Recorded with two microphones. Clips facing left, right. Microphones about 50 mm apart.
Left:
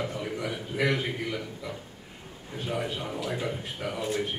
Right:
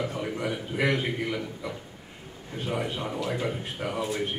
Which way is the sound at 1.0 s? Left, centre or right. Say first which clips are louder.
Right 2 dB; centre.